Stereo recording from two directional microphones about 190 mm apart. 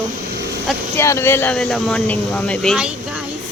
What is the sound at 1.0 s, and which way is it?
Speech, 15° left (ahead or behind).